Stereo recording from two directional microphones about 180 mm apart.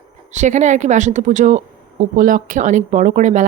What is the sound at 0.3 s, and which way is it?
A woman's voice, 40° right (ahead or behind).